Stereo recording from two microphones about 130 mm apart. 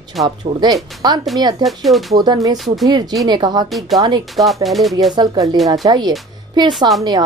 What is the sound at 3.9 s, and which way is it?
Speech, 35° right (ahead or behind).